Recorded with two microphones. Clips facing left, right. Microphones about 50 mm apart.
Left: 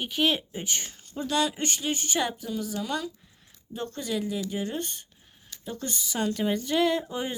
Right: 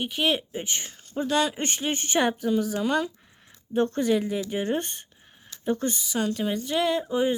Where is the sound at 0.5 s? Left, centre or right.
Centre.